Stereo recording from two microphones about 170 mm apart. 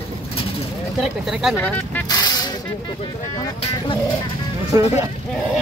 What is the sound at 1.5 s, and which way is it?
Speech, 10° left (ahead or behind).